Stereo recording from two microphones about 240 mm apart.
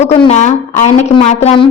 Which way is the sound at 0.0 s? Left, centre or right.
Left.